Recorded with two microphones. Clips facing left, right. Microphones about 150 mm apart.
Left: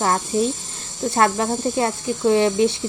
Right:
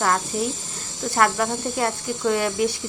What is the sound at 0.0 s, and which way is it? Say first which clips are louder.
Speech: left 3 dB; 25° left (ahead or behind).